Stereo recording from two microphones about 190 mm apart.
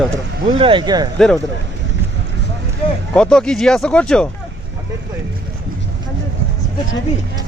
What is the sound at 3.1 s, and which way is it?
Speech, 5° left (ahead or behind).